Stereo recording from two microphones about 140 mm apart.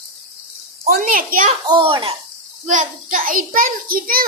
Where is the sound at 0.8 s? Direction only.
80° right.